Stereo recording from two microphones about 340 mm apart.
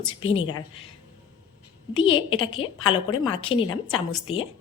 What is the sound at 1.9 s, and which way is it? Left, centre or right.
A woman's voice, left.